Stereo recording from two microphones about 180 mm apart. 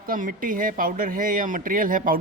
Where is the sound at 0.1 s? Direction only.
50° right (ahead or behind).